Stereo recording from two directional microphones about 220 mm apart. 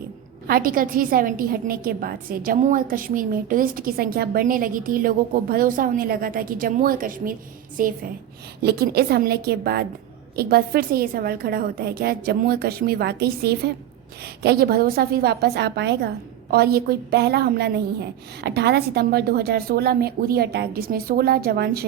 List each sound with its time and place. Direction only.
0.4 s a woman's voice: 40° right (ahead or behind)